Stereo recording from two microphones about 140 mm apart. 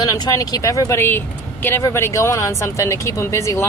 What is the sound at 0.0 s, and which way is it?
Speech, 25° left (ahead or behind).